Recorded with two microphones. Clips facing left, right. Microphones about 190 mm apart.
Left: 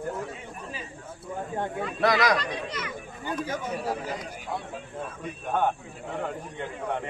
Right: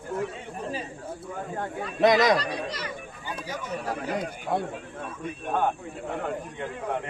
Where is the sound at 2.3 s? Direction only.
35° right (ahead or behind).